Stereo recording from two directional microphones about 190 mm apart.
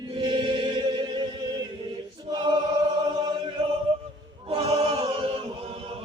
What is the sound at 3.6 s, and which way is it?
Music, 30° right (ahead or behind).